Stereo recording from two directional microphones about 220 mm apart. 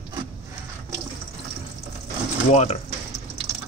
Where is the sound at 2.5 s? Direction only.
30° left (ahead or behind).